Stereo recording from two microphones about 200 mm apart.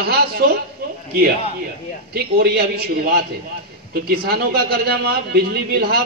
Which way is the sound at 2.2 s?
50° right (ahead or behind).